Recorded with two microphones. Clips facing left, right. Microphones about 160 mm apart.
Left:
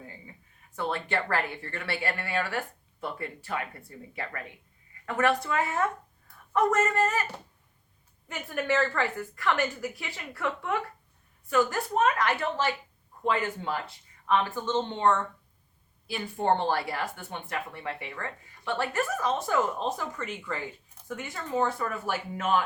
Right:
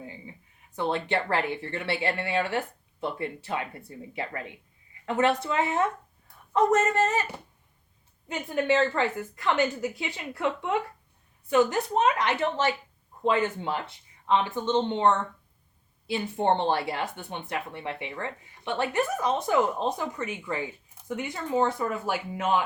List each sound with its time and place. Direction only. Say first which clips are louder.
0.8 s speech: right 3 dB; 20° right (ahead or behind)
8.3 s speech: right 4 dB; 20° right (ahead or behind)